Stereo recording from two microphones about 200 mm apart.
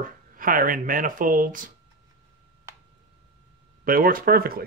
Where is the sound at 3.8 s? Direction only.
45° right (ahead or behind).